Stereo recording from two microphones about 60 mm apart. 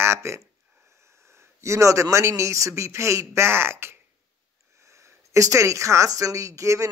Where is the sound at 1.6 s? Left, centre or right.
Right.